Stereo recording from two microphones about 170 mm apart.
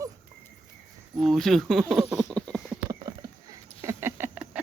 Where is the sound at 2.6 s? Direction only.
20° right (ahead or behind).